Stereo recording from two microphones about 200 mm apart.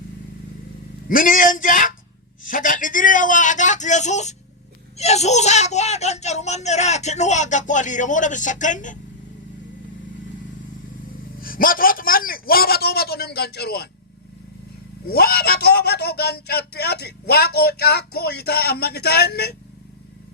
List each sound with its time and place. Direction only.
1.0 s speech: 45° left (ahead or behind)
11.3 s a sound: 45° left (ahead or behind)
15.0 s speech: 50° left (ahead or behind)